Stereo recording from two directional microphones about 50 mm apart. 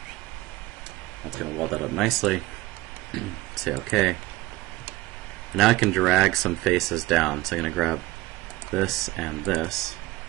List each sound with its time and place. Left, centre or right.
1.7 s speech: centre
5.5 s speech: centre
5.9 s speech: centre
9.4 s speech: centre